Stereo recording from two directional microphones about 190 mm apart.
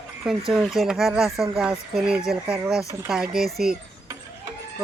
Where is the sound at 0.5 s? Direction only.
Centre (ahead or behind).